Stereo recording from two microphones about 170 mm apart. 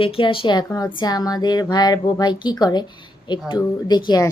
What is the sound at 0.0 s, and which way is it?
A woman's voice, 30° left (ahead or behind).